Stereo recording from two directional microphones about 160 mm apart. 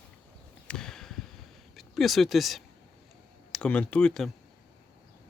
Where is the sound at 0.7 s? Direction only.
5° left (ahead or behind).